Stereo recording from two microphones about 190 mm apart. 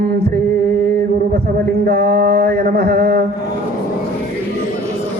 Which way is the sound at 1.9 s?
55° right (ahead or behind).